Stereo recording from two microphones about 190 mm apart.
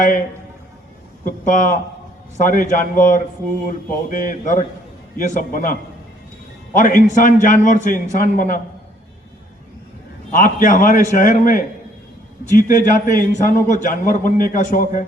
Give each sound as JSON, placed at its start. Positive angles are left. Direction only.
{"t": 1.2, "sound": "a man's voice", "side_deg": 45}
{"t": 6.7, "sound": "a man's voice", "side_deg": 45}
{"t": 10.3, "sound": "a man's voice", "side_deg": 45}